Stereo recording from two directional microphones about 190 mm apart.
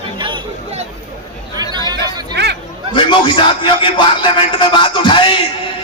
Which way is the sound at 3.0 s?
25° left (ahead or behind).